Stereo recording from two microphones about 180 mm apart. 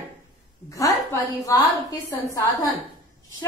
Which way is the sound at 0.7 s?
20° left (ahead or behind).